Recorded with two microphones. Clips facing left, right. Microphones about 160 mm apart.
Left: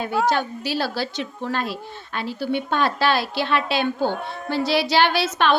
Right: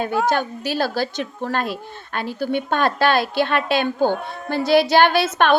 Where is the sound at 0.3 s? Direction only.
50° right (ahead or behind).